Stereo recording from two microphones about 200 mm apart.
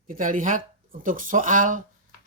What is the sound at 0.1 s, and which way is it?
Speech, 40° right (ahead or behind).